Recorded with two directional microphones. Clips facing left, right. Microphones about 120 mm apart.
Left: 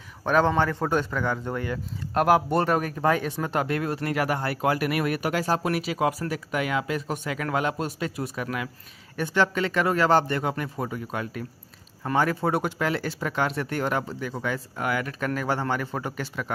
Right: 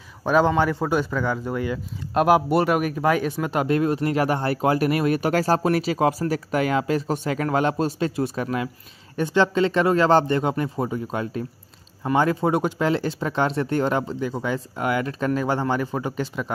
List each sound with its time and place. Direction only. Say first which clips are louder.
0.2 s a man's voice: right 3 dB; 10° right (ahead or behind); by 5.3 s 30° right (ahead or behind)
5.3 s speech: right 5 dB; 40° right (ahead or behind); by 16.5 s 20° right (ahead or behind)